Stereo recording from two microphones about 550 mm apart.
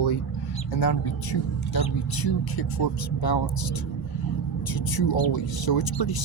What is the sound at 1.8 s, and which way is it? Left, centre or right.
Speech, left.